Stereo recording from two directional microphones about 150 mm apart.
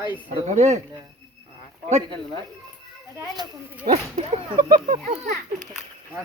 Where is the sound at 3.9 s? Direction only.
45° right (ahead or behind).